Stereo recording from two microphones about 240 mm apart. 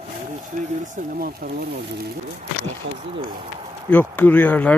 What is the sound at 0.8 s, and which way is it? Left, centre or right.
Speech, right.